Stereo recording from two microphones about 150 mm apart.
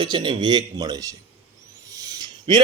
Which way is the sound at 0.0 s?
30° right (ahead or behind).